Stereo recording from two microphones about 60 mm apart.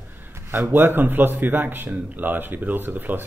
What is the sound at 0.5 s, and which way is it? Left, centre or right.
A man's voice, right.